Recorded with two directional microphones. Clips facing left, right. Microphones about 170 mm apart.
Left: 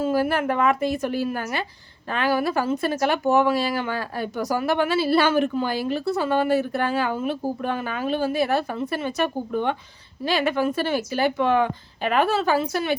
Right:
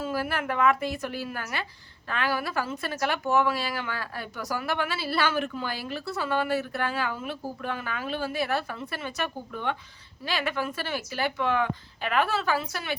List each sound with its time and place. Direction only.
0.0 s a woman's voice: 25° left (ahead or behind)